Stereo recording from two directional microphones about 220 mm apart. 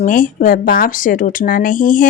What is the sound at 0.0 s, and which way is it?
Speech, 40° left (ahead or behind).